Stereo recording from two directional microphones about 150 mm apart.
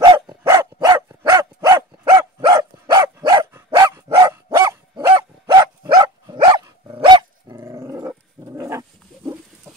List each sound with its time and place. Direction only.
0.0 s dog: 30° right (ahead or behind)